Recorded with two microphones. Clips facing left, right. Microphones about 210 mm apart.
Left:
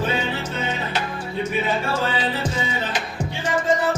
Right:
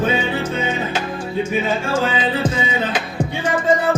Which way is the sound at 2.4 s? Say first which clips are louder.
Right 5 dB; 90° right.